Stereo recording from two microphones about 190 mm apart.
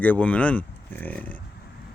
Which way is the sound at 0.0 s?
10° left (ahead or behind).